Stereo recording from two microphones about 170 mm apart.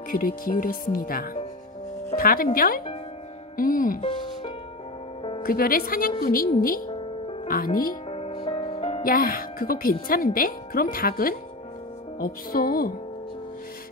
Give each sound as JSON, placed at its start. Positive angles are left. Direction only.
{"t": 0.1, "sound": "speech", "side_deg": 55}
{"t": 5.4, "sound": "speech", "side_deg": 60}
{"t": 8.1, "sound": "music", "side_deg": 30}
{"t": 9.0, "sound": "speech", "side_deg": 60}